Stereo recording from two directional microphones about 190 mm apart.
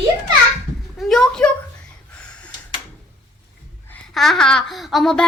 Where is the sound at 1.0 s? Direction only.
5° left (ahead or behind).